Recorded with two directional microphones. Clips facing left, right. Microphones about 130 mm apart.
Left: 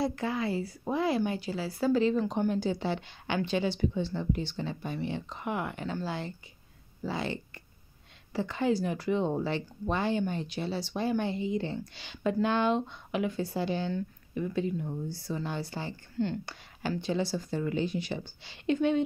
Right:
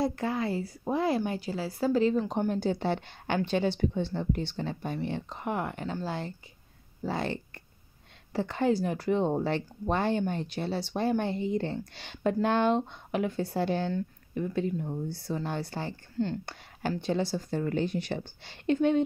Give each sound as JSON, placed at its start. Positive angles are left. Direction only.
{"t": 0.0, "sound": "speech", "side_deg": -45}
{"t": 2.6, "sound": "speech", "side_deg": -55}
{"t": 16.2, "sound": "speech", "side_deg": -40}
{"t": 17.0, "sound": "speech", "side_deg": -50}